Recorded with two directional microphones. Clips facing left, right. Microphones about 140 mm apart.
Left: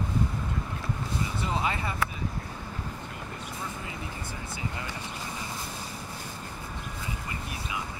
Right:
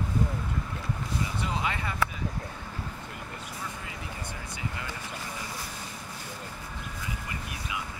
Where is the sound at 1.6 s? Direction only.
30° left (ahead or behind).